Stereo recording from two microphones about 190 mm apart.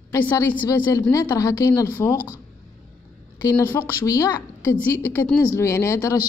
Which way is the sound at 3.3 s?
15° left (ahead or behind).